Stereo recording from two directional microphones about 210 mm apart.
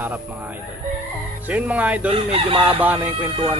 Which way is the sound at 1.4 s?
5° right (ahead or behind).